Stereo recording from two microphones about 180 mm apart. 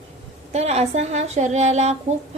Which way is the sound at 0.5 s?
35° right (ahead or behind).